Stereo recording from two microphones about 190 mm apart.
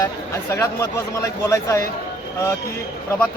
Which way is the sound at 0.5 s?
15° left (ahead or behind).